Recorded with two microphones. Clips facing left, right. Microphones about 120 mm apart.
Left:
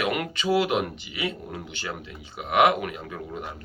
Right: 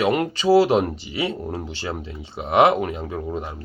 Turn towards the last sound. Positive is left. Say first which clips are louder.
# right 6 dB
turn(degrees=-30)  # may be behind; listen again after turning